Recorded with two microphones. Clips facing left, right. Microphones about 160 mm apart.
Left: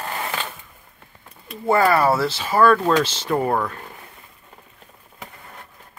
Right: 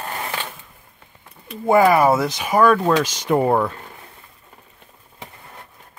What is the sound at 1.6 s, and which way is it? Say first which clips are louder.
Speech: right 3 dB; 15° right (ahead or behind).